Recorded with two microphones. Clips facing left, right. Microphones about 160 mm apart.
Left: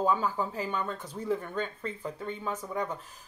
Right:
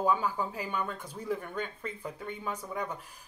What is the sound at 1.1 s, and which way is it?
Speech, 30° left (ahead or behind).